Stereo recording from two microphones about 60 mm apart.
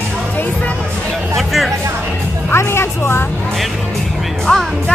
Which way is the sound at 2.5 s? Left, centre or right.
Left.